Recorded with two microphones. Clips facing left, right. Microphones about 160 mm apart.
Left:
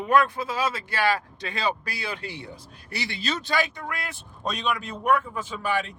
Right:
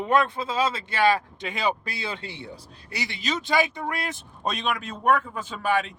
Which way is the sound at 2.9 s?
20° right (ahead or behind).